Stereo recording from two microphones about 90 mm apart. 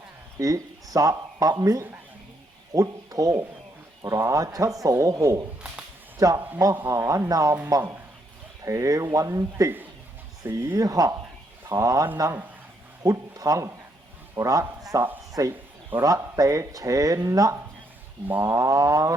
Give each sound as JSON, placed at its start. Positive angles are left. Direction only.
{"t": 0.3, "sound": "speech", "side_deg": -40}
{"t": 10.8, "sound": "a man's voice", "side_deg": -40}